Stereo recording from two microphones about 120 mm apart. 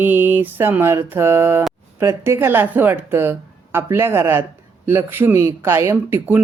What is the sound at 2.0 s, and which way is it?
Speech, 20° right (ahead or behind).